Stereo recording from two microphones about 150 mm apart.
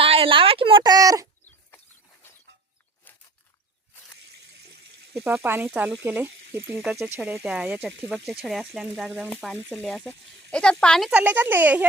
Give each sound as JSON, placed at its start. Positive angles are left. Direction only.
{"t": 0.0, "sound": "a sound", "side_deg": -40}
{"t": 4.5, "sound": "water", "side_deg": -90}
{"t": 5.2, "sound": "speech", "side_deg": -15}
{"t": 11.1, "sound": "speech", "side_deg": -10}